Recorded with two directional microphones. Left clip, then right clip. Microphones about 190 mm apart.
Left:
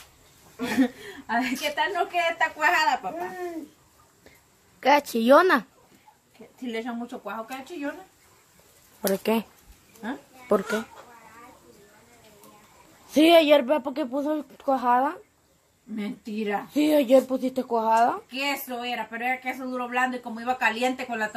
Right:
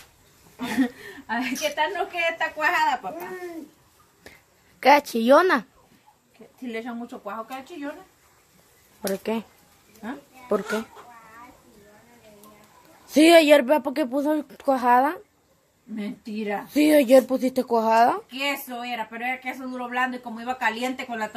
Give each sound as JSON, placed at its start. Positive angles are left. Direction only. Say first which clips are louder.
{"t": 0.6, "sound": "speech", "louder": "left 1 dB", "side_deg": 5}
{"t": 4.7, "sound": "speech", "louder": "right 3 dB", "side_deg": -10}
{"t": 9.0, "sound": "speech", "louder": "left 3 dB", "side_deg": 10}
{"t": 13.1, "sound": "speech", "louder": "right 2 dB", "side_deg": -20}
{"t": 16.0, "sound": "speech", "louder": "even", "side_deg": 0}
{"t": 16.7, "sound": "speech", "louder": "right 3 dB", "side_deg": -25}
{"t": 18.3, "sound": "speech", "louder": "right 1 dB", "side_deg": 0}